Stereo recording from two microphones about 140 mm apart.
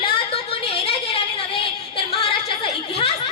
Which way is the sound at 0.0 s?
40° left (ahead or behind).